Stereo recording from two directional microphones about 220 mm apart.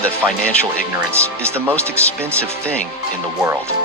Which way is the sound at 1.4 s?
10° right (ahead or behind).